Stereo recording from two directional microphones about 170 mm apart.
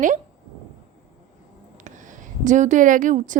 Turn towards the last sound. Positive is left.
turn(degrees=-50)  # may be behind; listen again after turning